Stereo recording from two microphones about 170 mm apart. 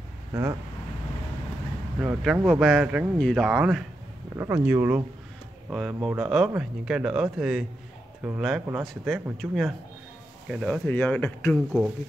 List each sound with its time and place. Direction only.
0.3 s speech: 20° right (ahead or behind)
2.0 s speech: 5° right (ahead or behind); by 11.5 s 10° left (ahead or behind)
11.5 s speech: 5° right (ahead or behind)